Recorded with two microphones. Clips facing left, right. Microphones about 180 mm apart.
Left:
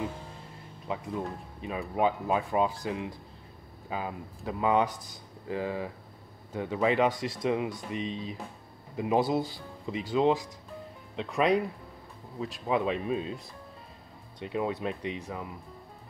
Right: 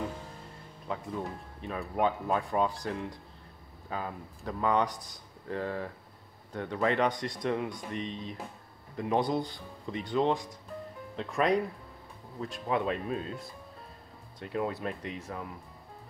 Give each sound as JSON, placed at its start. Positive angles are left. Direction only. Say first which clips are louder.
{"t": 0.8, "sound": "speech", "louder": "left 2 dB", "side_deg": 5}
{"t": 11.1, "sound": "speech", "louder": "left 2 dB", "side_deg": 20}
{"t": 12.4, "sound": "speech", "louder": "left 2 dB", "side_deg": 5}
{"t": 14.5, "sound": "speech", "louder": "left 2 dB", "side_deg": 0}
{"t": 14.9, "sound": "speech", "louder": "left 3 dB", "side_deg": 20}
{"t": 15.1, "sound": "speech", "louder": "left 2 dB", "side_deg": 0}